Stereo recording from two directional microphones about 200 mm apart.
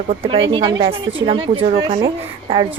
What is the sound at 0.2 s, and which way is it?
A woman's voice, 25° right (ahead or behind).